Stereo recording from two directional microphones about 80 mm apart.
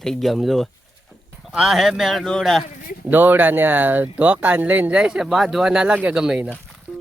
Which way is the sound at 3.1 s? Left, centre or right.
Right.